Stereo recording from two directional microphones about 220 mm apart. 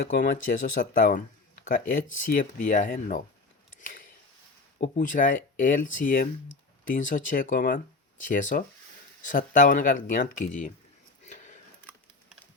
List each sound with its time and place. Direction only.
0.1 s speech: 40° left (ahead or behind)
3.8 s a sound: 40° left (ahead or behind)
4.8 s speech: 35° left (ahead or behind)